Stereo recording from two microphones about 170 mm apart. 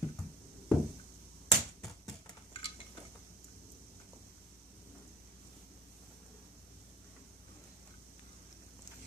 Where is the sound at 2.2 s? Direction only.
30° left (ahead or behind).